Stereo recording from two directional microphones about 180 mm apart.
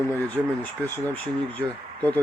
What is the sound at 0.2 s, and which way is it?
Speech, 10° left (ahead or behind).